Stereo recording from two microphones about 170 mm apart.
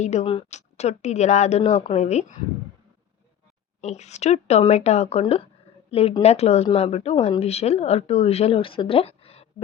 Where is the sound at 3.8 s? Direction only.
40° left (ahead or behind).